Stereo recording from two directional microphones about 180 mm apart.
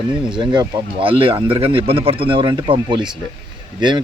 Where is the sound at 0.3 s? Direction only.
25° right (ahead or behind).